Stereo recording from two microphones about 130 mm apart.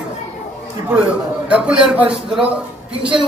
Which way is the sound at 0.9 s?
10° right (ahead or behind).